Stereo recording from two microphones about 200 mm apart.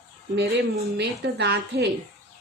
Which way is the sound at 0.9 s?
55° right (ahead or behind).